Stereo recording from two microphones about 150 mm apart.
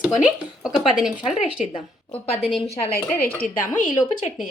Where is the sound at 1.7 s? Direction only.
35° left (ahead or behind).